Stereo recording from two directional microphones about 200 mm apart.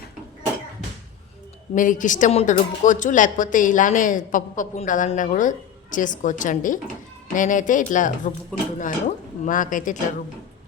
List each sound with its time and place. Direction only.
1.7 s speech: 40° left (ahead or behind)